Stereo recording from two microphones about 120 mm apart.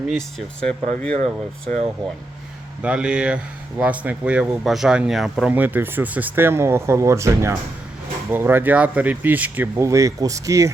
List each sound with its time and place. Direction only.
0.1 s speech: 5° left (ahead or behind)
2.8 s speech: 10° right (ahead or behind)
5.5 s speech: 15° right (ahead or behind)
9.8 s speech: 25° right (ahead or behind)